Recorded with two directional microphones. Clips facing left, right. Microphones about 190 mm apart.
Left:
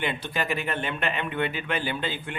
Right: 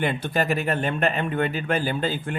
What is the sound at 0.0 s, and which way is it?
Speech, 45° right (ahead or behind).